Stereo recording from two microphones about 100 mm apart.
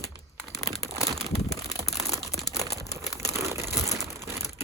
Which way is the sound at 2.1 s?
Centre (ahead or behind).